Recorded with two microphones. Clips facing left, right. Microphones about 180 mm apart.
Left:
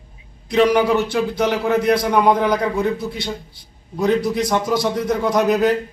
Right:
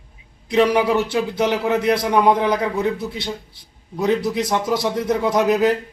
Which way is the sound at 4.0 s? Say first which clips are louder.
Left 1 dB; 5° right (ahead or behind).